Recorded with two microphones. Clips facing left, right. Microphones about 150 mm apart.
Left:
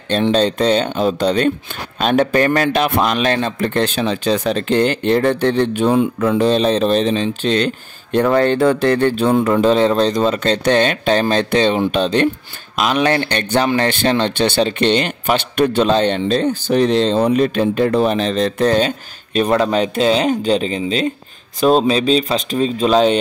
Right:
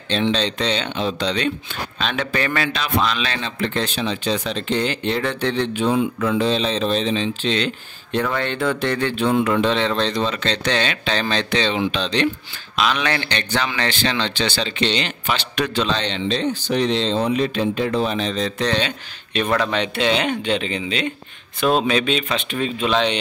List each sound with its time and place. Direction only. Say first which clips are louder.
0.1 s a man's voice: left 6 dB; 50° left (ahead or behind)